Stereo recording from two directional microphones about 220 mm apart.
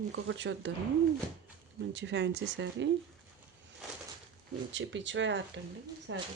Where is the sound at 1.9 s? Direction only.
55° right (ahead or behind).